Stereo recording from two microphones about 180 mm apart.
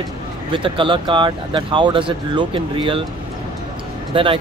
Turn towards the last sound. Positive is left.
turn(degrees=-30)  # may be behind; listen again after turning